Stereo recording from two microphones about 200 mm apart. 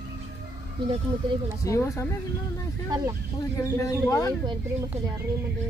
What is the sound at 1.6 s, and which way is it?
Speech, 15° left (ahead or behind).